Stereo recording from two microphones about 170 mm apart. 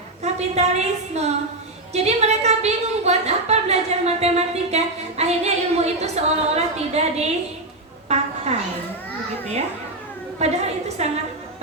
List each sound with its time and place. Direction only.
0.2 s a woman's voice: 40° right (ahead or behind)
8.0 s a sound: 40° right (ahead or behind)
10.3 s a woman's voice: 40° right (ahead or behind)